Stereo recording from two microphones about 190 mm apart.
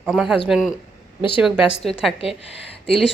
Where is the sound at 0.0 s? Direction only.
Centre (ahead or behind).